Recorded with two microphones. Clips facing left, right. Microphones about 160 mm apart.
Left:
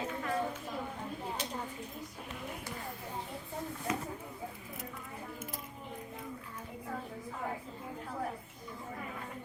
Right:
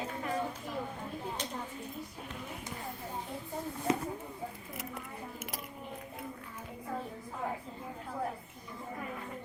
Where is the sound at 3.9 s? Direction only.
30° right (ahead or behind).